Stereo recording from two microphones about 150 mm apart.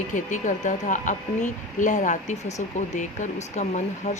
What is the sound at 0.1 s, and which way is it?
A woman's voice, 55° left (ahead or behind).